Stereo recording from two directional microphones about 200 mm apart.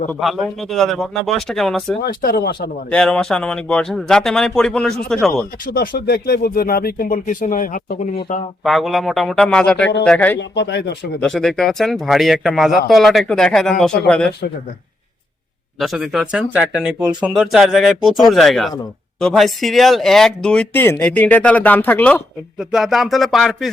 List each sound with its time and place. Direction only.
0.1 s speech: centre (ahead or behind)
2.0 s speech: 50° left (ahead or behind)
2.9 s speech: 5° left (ahead or behind)
5.6 s speech: 45° left (ahead or behind)
8.6 s speech: centre (ahead or behind)
10.5 s speech: 60° left (ahead or behind)
11.2 s speech: 5° left (ahead or behind)
15.8 s speech: centre (ahead or behind)